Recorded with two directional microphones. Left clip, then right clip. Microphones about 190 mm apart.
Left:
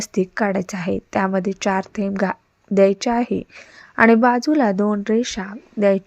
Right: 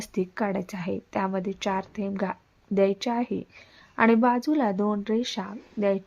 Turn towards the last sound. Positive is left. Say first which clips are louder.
# left 8 dB
turn(degrees=30)  # may be behind; listen again after turning